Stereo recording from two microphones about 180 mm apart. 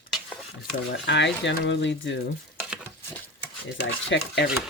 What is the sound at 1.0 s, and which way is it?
Speech, 80° left.